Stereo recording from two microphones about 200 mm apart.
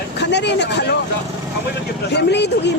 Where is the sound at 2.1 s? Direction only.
60° left (ahead or behind).